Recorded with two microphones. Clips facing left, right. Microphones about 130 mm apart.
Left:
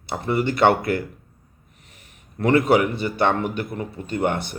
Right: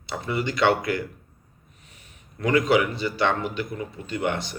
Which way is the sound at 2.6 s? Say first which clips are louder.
Left 3 dB; 55° left (ahead or behind).